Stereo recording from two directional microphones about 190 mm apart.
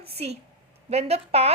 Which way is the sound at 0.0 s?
30° right (ahead or behind).